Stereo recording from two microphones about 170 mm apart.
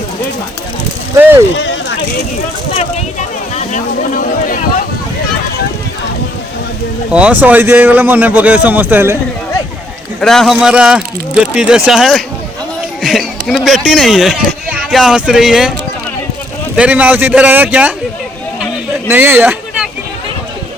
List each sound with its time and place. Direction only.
1.1 s speech: 15° right (ahead or behind)
1.5 s a sound: 90° left
2.7 s speech: 45° left (ahead or behind)
7.1 s speech: 10° right (ahead or behind)
10.2 s speech: centre (ahead or behind)
16.7 s speech: 5° right (ahead or behind)
19.0 s speech: 10° right (ahead or behind)